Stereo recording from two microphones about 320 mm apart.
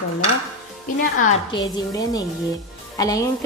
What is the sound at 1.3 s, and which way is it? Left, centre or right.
A woman's voice, centre.